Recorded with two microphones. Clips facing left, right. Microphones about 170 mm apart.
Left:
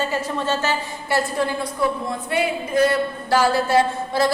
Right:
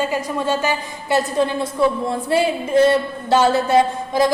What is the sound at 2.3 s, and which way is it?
A woman's voice, 30° right (ahead or behind).